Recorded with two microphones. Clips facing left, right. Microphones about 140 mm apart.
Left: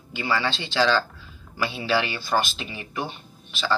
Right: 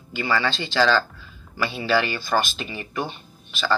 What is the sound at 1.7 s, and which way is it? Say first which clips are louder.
Speech: right 3 dB; 50° right (ahead or behind).